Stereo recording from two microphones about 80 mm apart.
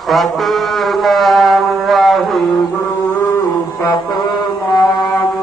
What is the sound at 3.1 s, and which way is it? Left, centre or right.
Mantra, left.